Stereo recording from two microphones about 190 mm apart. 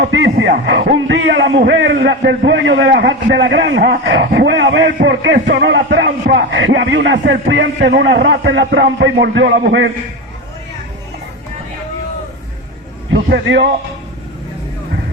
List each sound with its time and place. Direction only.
0.0 s a man's voice: 65° right (ahead or behind)
13.4 s a man's voice: 75° right (ahead or behind)